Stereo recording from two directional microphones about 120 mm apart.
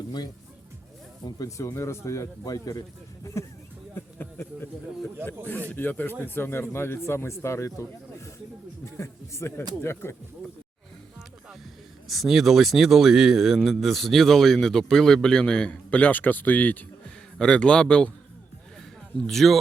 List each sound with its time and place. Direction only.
1.2 s a man's voice: 30° left (ahead or behind)
12.0 s a man's voice: centre (ahead or behind)
19.1 s speech: centre (ahead or behind)